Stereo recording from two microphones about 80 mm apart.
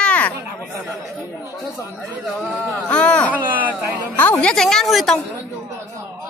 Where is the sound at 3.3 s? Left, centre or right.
Right.